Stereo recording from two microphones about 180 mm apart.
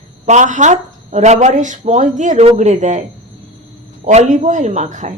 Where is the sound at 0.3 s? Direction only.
40° right (ahead or behind).